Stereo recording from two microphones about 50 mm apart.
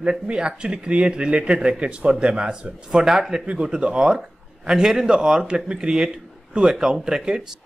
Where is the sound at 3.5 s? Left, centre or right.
Centre.